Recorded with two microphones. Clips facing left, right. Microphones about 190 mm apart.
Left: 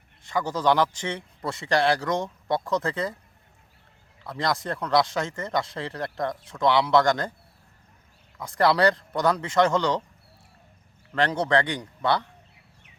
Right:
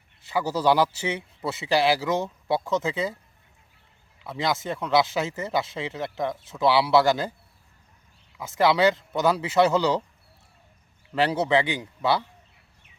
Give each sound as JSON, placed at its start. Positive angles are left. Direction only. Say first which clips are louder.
{"t": 0.2, "sound": "speech", "louder": "right 1 dB", "side_deg": -10}
{"t": 4.2, "sound": "speech", "louder": "even", "side_deg": -5}
{"t": 8.4, "sound": "speech", "louder": "even", "side_deg": -5}
{"t": 11.1, "sound": "speech", "louder": "right 1 dB", "side_deg": -10}